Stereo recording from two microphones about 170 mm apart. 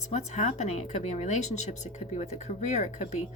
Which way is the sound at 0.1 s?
40° left (ahead or behind).